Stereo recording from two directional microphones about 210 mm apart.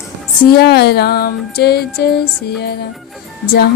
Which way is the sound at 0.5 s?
50° left (ahead or behind).